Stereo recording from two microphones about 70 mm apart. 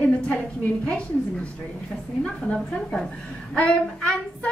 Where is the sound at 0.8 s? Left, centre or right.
Centre.